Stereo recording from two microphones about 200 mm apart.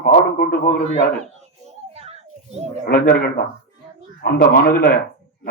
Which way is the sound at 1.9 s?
30° right (ahead or behind).